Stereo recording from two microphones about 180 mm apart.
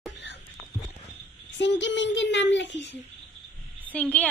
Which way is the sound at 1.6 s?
80° left.